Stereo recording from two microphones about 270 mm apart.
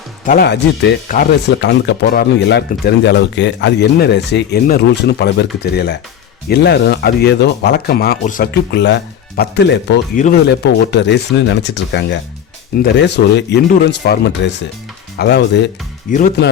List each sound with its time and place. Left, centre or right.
0.3 s speech: left